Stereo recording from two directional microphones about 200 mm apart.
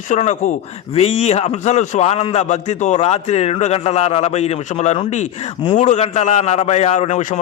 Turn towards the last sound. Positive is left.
turn(degrees=35)  # may be behind; listen again after turning